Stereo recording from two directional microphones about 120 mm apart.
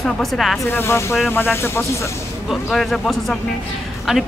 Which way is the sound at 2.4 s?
Centre (ahead or behind).